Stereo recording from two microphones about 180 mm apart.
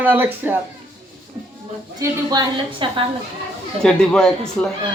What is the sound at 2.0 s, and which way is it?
A woman's voice, 25° right (ahead or behind).